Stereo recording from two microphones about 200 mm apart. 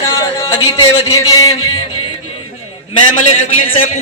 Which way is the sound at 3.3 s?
40° left (ahead or behind).